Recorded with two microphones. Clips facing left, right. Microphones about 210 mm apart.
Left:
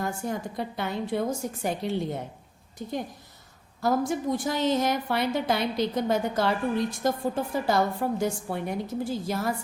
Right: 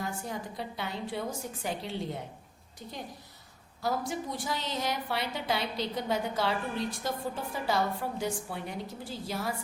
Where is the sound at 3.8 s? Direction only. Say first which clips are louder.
Left 7 dB; 50° left (ahead or behind).